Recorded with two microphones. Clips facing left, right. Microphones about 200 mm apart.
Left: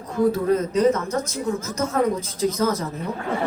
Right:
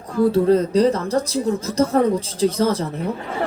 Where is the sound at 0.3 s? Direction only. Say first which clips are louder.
Right 6 dB; 30° right (ahead or behind).